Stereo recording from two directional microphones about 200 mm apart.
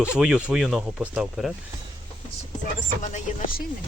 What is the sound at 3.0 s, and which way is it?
Speech, 45° left (ahead or behind).